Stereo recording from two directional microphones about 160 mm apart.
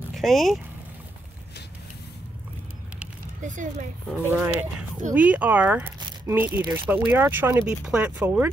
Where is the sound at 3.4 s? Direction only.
50° right (ahead or behind).